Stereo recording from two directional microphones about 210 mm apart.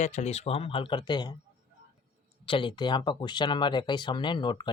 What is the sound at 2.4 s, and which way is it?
Speech, 25° left (ahead or behind).